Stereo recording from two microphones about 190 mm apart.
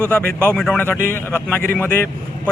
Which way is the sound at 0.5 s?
5° left (ahead or behind).